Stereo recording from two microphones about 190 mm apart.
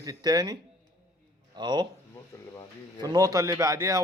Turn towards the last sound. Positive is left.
turn(degrees=-15)  # may be behind; listen again after turning